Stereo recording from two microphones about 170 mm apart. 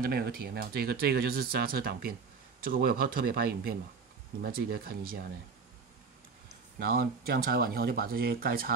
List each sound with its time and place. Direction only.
0.0 s speech: 65° right (ahead or behind)
6.9 s speech: 60° right (ahead or behind)